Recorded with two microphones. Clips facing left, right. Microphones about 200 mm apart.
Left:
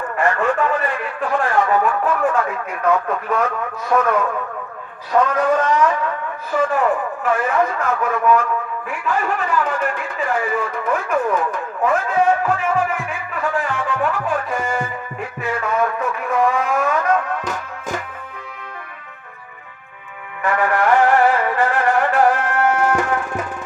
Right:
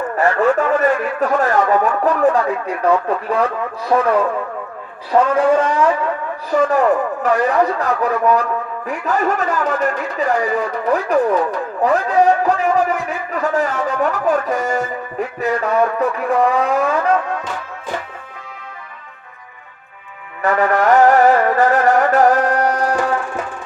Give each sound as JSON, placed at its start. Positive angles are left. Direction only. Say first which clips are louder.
{"t": 0.2, "sound": "a man's voice", "louder": "right 3 dB", "side_deg": -40}
{"t": 5.3, "sound": "a sound", "louder": "right 3 dB", "side_deg": -30}
{"t": 6.5, "sound": "a man's voice", "louder": "right 4 dB", "side_deg": -40}
{"t": 17.4, "sound": "music", "louder": "even", "side_deg": 45}
{"t": 20.4, "sound": "music", "louder": "right 3 dB", "side_deg": -40}